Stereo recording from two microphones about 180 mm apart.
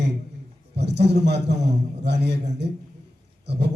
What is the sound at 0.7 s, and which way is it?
A man's voice, 70° right (ahead or behind).